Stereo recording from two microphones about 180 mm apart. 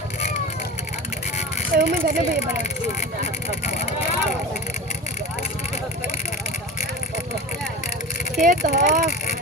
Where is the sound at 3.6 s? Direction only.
35° left (ahead or behind).